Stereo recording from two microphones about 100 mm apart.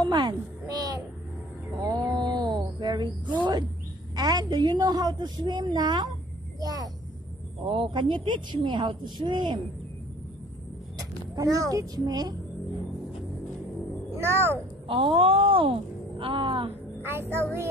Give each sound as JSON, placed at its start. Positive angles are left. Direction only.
{"t": 0.0, "sound": "a sound", "side_deg": -50}
{"t": 4.1, "sound": "a woman's voice", "side_deg": -40}
{"t": 7.6, "sound": "a woman's voice", "side_deg": -60}
{"t": 11.0, "sound": "speech", "side_deg": -40}
{"t": 14.1, "sound": "speech", "side_deg": -25}
{"t": 14.9, "sound": "speech", "side_deg": -60}
{"t": 17.0, "sound": "speech", "side_deg": -25}